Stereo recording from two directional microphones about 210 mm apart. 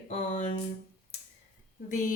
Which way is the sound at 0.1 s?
35° left (ahead or behind).